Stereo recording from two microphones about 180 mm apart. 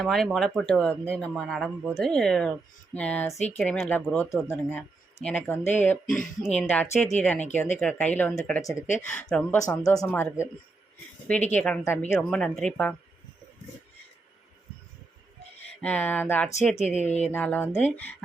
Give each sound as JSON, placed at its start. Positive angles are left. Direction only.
{"t": 0.0, "sound": "speech", "side_deg": 0}
{"t": 3.3, "sound": "speech", "side_deg": 40}
{"t": 3.6, "sound": "speech", "side_deg": 5}
{"t": 9.6, "sound": "speech", "side_deg": 20}
{"t": 11.5, "sound": "speech", "side_deg": 5}
{"t": 15.8, "sound": "speech", "side_deg": 10}
{"t": 16.5, "sound": "speech", "side_deg": 40}
{"t": 17.3, "sound": "speech", "side_deg": 10}